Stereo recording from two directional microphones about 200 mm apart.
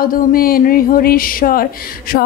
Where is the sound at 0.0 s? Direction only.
45° left (ahead or behind).